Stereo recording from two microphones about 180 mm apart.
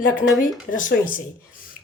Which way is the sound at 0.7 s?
50° left (ahead or behind).